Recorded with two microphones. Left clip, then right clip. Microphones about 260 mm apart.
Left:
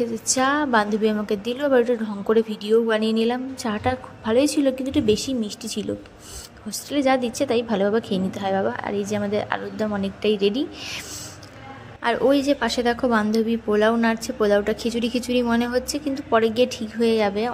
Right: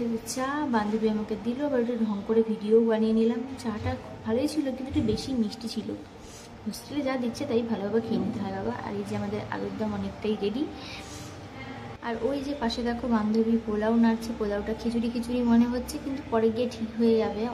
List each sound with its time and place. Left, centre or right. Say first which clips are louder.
0.3 s a woman's voice: left 10 dB; left
12.0 s a woman's voice: left 11 dB; left